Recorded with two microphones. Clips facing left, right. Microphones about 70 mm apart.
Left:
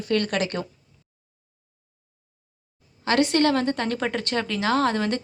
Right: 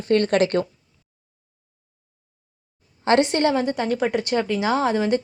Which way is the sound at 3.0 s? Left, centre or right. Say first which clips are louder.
Right 2 dB; right.